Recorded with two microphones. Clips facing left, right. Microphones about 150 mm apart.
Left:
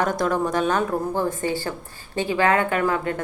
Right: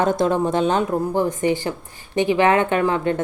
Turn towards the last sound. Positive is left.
turn(degrees=-25)  # may be behind; listen again after turning